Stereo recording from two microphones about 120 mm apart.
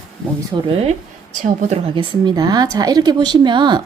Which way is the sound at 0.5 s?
40° right (ahead or behind).